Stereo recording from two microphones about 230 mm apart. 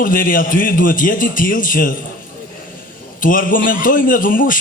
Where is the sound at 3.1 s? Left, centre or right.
Left.